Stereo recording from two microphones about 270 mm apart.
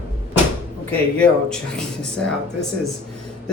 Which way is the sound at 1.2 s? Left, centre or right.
Centre.